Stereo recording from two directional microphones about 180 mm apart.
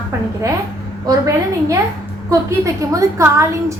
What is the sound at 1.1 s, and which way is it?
A woman's voice, 15° right (ahead or behind).